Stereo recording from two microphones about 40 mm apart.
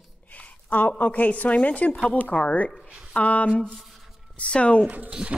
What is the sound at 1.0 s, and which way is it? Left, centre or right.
A woman's voice, left.